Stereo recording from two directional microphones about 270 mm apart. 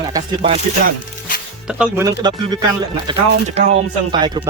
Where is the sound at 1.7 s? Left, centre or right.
Centre.